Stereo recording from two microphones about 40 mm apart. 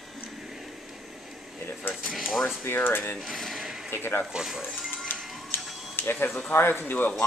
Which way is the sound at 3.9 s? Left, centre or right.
Left.